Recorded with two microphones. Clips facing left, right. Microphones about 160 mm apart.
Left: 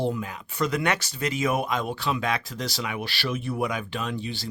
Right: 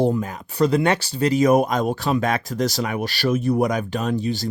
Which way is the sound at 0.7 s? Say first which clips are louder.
Right 7 dB; 30° right (ahead or behind).